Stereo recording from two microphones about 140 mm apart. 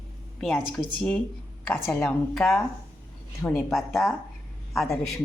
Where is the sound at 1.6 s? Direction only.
10° left (ahead or behind).